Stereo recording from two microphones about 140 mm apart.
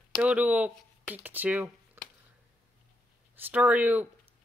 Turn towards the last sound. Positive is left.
turn(degrees=-15)  # may be behind; listen again after turning